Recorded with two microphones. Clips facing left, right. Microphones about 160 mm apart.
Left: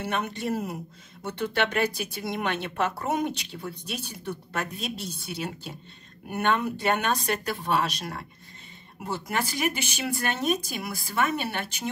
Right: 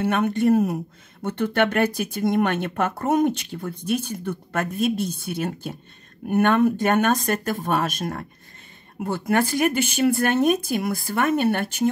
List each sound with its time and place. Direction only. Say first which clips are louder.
0.0 s speech: right 9 dB; 55° right (ahead or behind)